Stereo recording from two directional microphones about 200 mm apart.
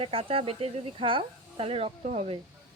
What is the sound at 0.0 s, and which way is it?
Speech, 30° right (ahead or behind).